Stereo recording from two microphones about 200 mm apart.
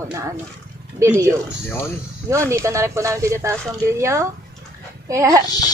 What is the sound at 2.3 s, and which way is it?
A woman's voice, 15° right (ahead or behind).